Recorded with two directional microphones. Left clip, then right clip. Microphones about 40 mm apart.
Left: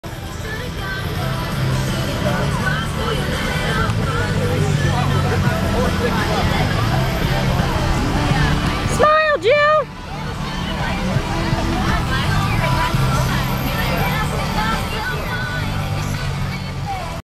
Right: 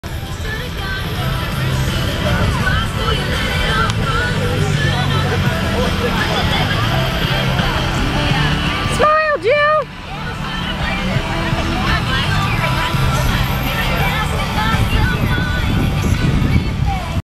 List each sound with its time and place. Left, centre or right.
2.2 s vehicle: right
9.0 s a sound: centre
9.5 s vehicle: centre
11.8 s hubbub: right
12.2 s music: right